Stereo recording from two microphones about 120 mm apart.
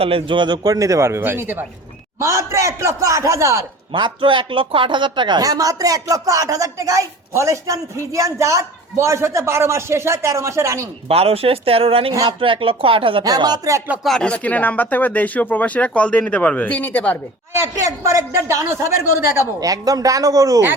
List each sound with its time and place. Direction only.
0.0 s speech: 50° right (ahead or behind); by 3.6 s 25° right (ahead or behind)
3.9 s speech: 40° right (ahead or behind); by 10.8 s 25° right (ahead or behind)
11.1 s speech: 55° right (ahead or behind)
13.2 s speech: 35° right (ahead or behind)
13.7 s music: 15° right (ahead or behind)
14.0 s speech: 5° left (ahead or behind)
17.5 s speech: 25° right (ahead or behind)